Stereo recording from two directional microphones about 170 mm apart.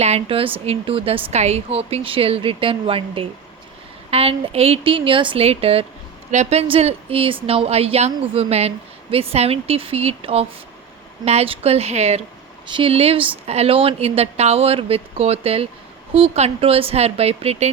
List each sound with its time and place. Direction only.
0.0 s speech: 35° right (ahead or behind)
12.6 s speech: 30° right (ahead or behind)